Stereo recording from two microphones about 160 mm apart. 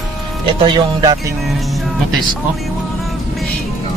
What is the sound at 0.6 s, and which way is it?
Speech, 25° right (ahead or behind).